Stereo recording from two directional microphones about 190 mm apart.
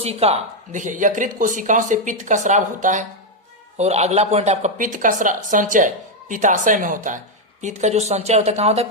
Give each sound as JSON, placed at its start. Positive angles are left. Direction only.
{"t": 0.0, "sound": "a woman's voice", "side_deg": -35}